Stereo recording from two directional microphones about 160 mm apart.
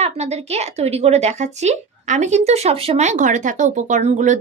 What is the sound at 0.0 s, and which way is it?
A woman's voice, 40° right (ahead or behind).